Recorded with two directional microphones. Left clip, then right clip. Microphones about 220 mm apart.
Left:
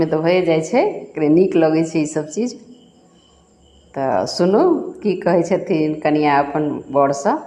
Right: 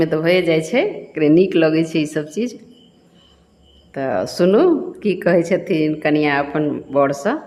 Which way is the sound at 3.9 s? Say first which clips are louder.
Left 2 dB; 10° right (ahead or behind).